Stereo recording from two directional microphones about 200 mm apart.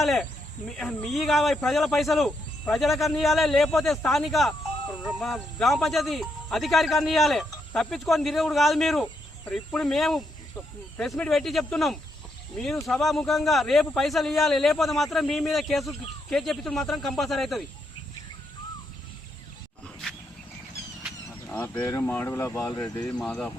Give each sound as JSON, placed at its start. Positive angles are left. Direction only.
{"t": 0.0, "sound": "a man's voice", "side_deg": 0}
{"t": 21.4, "sound": "speech", "side_deg": 10}
{"t": 23.0, "sound": "a man's voice", "side_deg": 5}